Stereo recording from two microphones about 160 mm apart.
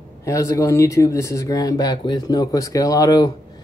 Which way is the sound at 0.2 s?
20° left (ahead or behind).